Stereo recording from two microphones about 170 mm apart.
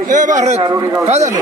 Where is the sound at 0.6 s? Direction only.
15° right (ahead or behind).